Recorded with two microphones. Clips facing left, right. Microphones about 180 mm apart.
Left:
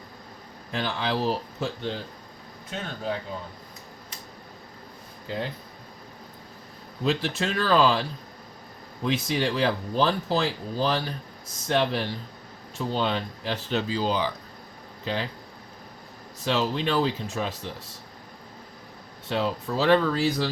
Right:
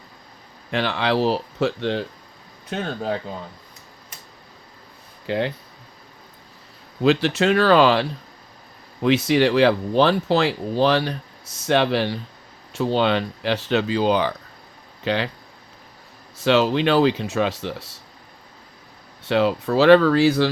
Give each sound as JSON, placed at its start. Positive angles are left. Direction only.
{"t": 0.7, "sound": "speech", "side_deg": -75}
{"t": 5.2, "sound": "speech", "side_deg": -75}
{"t": 7.0, "sound": "speech", "side_deg": -75}
{"t": 9.0, "sound": "speech", "side_deg": -75}
{"t": 15.0, "sound": "speech", "side_deg": -75}
{"t": 16.4, "sound": "speech", "side_deg": -75}
{"t": 19.3, "sound": "speech", "side_deg": -75}